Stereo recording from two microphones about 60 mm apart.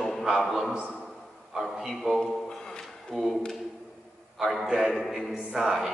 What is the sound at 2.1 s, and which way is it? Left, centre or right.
A capella, centre.